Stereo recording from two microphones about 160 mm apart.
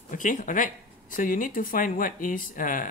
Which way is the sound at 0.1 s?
55° left (ahead or behind).